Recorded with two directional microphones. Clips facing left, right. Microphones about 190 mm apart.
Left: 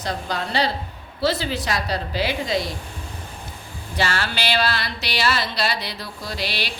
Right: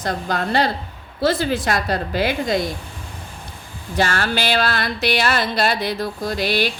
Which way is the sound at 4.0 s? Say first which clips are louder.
Right 4 dB; 45° right (ahead or behind).